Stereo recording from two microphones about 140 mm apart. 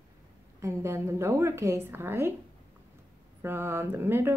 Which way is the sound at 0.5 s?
20° right (ahead or behind).